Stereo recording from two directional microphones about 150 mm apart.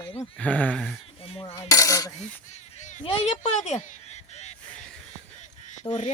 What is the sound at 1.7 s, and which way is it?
Cutlery, 25° left (ahead or behind).